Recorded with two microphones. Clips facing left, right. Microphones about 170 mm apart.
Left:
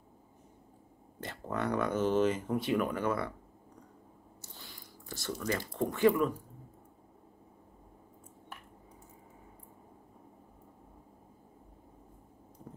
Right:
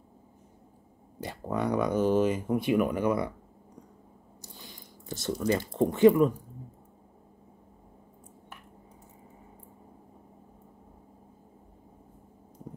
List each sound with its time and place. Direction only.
1.2 s speech: 15° right (ahead or behind)
4.4 s a sound: 15° right (ahead or behind)
5.3 s speech: 30° right (ahead or behind)